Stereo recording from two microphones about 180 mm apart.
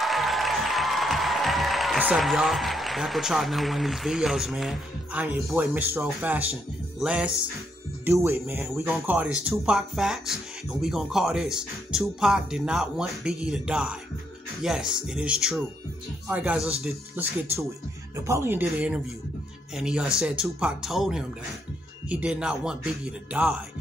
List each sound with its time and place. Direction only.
0.0 s music: centre (ahead or behind)
5.8 s speech: 10° right (ahead or behind)
7.0 s music: 5° right (ahead or behind)
8.0 s speech: 15° right (ahead or behind)